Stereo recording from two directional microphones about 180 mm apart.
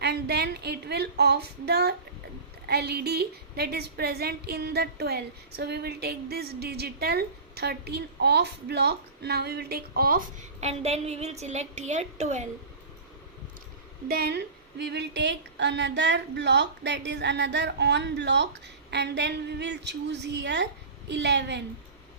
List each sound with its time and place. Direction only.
0.0 s a woman's voice: 65° right (ahead or behind)
10.6 s a woman's voice: 35° right (ahead or behind)
14.1 s a woman's voice: 65° right (ahead or behind)